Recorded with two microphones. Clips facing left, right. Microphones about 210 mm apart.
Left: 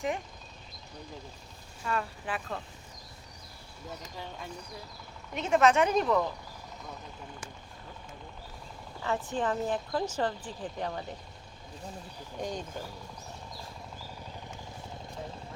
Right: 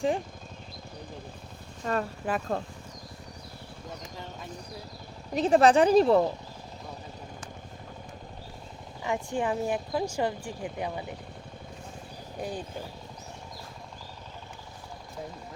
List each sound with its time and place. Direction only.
1.8 s speech: 40° right (ahead or behind)
5.3 s speech: 35° right (ahead or behind)
9.0 s speech: 15° right (ahead or behind)
12.4 s speech: 5° right (ahead or behind)